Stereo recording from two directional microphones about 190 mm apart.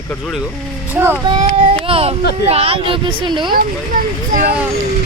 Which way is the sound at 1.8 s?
30° right (ahead or behind).